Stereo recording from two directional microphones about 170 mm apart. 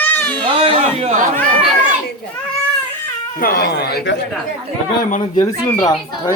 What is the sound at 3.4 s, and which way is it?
Speech, 65° left (ahead or behind).